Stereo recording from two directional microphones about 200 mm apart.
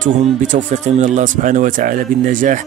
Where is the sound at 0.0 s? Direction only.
40° right (ahead or behind).